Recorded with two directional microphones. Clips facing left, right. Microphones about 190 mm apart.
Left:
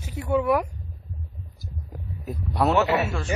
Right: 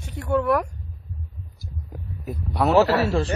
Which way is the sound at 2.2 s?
Centre (ahead or behind).